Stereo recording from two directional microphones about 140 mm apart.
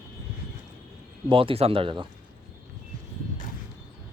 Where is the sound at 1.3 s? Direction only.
40° right (ahead or behind).